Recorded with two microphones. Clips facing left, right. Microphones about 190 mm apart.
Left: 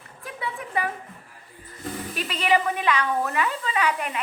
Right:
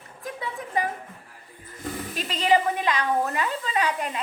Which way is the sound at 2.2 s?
35° right (ahead or behind).